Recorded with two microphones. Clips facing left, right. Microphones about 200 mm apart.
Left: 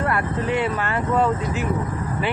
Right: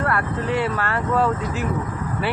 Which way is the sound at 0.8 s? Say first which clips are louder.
Even; 15° left (ahead or behind).